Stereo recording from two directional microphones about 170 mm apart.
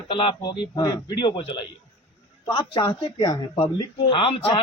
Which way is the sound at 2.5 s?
30° left (ahead or behind).